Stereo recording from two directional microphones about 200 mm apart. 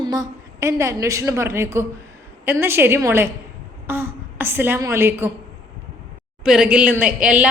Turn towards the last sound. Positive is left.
turn(degrees=-5)  # may be behind; listen again after turning